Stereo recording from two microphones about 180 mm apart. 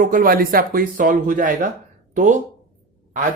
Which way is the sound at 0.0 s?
50° right (ahead or behind).